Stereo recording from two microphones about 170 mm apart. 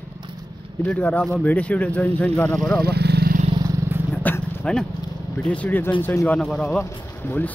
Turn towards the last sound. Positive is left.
turn(degrees=10)  # may be behind; listen again after turning